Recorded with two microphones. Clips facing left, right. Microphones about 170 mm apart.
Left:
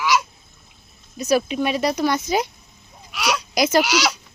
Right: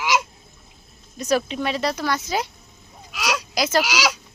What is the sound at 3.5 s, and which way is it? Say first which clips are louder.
Speech: left 4 dB; 15° left (ahead or behind).